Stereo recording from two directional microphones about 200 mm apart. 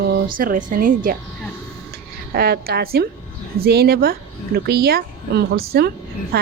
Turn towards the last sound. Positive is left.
turn(degrees=-50)  # may be behind; listen again after turning